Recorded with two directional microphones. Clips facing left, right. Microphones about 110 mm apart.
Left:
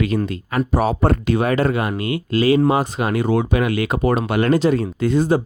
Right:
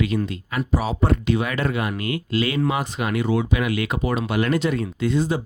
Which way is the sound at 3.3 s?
50° left (ahead or behind).